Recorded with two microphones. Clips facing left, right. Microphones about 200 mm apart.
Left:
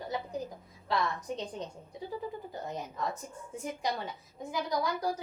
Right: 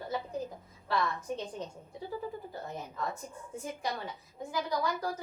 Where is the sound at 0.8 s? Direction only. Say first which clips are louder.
Even; 20° left (ahead or behind).